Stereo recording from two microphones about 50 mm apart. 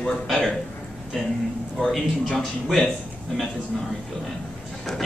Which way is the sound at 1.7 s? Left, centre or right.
Centre.